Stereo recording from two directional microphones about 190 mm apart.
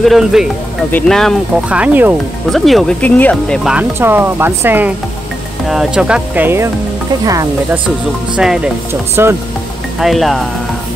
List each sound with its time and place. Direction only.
0.0 s speech: centre (ahead or behind); by 7.8 s 15° right (ahead or behind)
9.1 s speech: 15° right (ahead or behind)
9.9 s speech: centre (ahead or behind)